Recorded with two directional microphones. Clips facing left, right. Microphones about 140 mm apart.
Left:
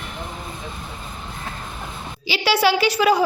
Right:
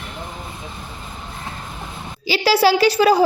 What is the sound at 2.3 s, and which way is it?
Speech, 35° right (ahead or behind).